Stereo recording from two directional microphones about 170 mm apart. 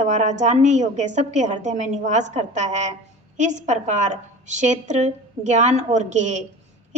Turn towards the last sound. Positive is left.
turn(degrees=-45)  # may be behind; listen again after turning